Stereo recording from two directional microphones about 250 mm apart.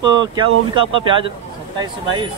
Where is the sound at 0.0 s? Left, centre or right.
Centre.